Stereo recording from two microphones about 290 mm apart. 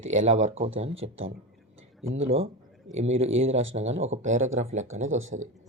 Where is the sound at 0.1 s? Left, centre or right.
Right.